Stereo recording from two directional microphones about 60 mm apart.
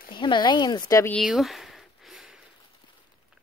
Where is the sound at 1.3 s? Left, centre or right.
Centre.